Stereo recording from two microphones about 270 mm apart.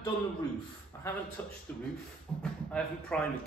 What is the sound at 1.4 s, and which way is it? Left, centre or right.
A man's voice, centre.